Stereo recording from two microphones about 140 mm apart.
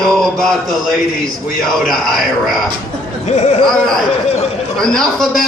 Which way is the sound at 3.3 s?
55° left (ahead or behind).